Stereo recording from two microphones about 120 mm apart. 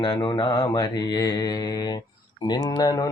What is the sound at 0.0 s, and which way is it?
Mantra, 40° left (ahead or behind).